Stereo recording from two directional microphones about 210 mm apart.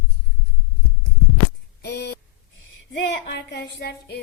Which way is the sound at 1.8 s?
50° left (ahead or behind).